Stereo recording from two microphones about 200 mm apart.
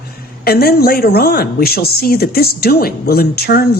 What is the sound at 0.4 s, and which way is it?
A woman's voice, 50° left (ahead or behind).